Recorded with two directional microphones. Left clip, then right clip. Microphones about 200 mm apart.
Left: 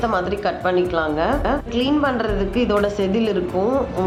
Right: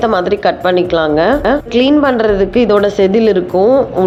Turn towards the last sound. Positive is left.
turn(degrees=-15)  # may be behind; listen again after turning